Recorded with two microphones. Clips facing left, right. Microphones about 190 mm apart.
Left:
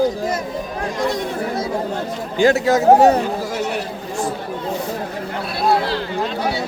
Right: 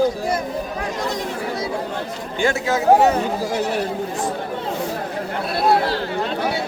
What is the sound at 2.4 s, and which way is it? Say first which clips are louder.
Speech: left 6 dB; 35° left (ahead or behind).